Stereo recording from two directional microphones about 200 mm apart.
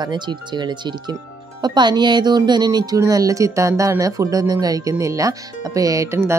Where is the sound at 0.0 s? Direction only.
20° right (ahead or behind).